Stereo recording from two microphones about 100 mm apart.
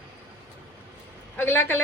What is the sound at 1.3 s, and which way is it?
Speech, 20° left (ahead or behind).